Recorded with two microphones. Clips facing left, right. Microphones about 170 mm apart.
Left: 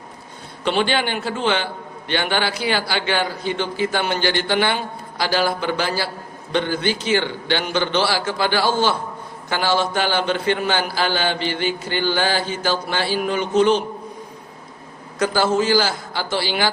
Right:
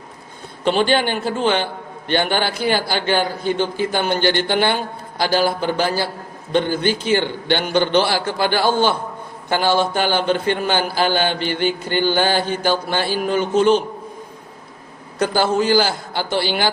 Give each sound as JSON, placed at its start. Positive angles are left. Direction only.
{"t": 0.6, "sound": "a man's voice", "side_deg": -45}
{"t": 15.4, "sound": "a man's voice", "side_deg": -55}